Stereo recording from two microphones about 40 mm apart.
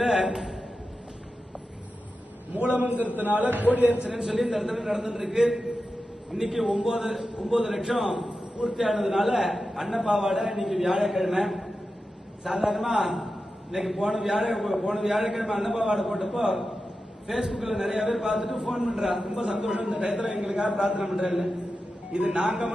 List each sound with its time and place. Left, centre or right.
0.0 s a man's voice: centre
2.7 s a man's voice: right
4.1 s a man's voice: centre
21.0 s a man's voice: centre
22.1 s a man's voice: right